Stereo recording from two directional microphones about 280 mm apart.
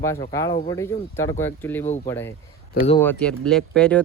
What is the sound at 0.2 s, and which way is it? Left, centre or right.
Speech, centre.